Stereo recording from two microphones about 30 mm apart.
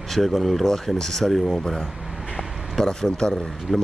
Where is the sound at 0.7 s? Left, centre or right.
Centre.